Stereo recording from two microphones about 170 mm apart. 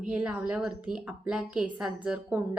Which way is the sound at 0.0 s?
5° right (ahead or behind).